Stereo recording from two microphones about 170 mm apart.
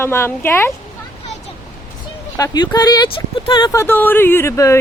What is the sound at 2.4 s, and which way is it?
Speech, 25° left (ahead or behind).